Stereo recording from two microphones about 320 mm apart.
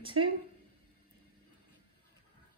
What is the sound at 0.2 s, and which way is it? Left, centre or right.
Speech, right.